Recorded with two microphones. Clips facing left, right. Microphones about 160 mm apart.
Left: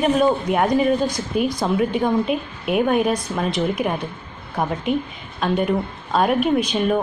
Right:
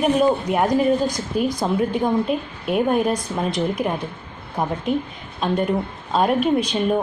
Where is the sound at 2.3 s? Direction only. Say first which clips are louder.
Left 1 dB; 5° left (ahead or behind).